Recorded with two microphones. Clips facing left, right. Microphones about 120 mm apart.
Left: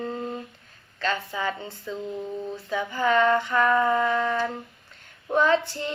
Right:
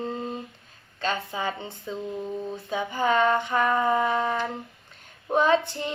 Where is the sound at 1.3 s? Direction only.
25° right (ahead or behind).